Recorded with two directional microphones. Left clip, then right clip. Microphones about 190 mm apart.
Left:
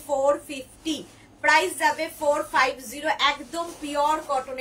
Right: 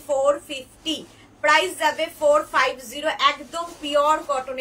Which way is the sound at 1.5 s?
20° right (ahead or behind).